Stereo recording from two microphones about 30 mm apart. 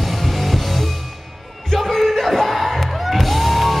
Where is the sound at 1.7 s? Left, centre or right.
Centre.